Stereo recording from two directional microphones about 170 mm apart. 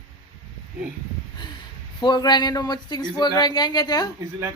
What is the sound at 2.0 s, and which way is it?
Speech, 25° left (ahead or behind).